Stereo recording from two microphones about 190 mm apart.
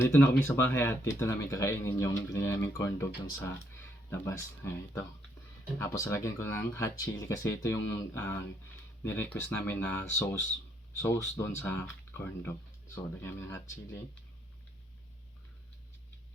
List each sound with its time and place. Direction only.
0.0 s speech: 10° left (ahead or behind)